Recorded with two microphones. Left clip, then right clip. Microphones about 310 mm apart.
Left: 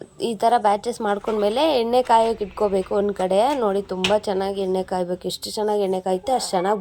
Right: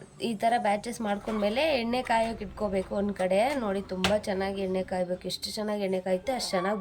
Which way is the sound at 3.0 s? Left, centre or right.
Left.